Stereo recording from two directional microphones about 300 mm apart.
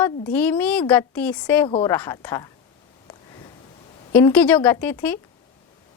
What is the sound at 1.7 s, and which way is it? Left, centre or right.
Speech, centre.